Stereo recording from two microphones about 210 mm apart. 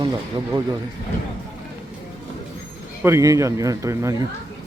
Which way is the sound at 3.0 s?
15° right (ahead or behind).